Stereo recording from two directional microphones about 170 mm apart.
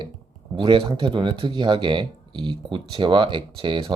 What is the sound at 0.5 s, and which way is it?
Speech, 25° right (ahead or behind).